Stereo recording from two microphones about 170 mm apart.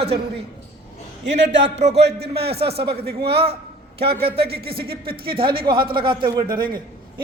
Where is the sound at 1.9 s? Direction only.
75° right (ahead or behind).